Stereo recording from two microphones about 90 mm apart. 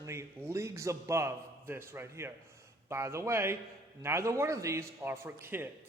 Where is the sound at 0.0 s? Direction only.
30° right (ahead or behind).